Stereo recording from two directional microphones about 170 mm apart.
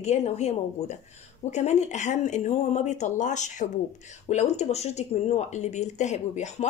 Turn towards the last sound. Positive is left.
turn(degrees=45)  # may be behind; listen again after turning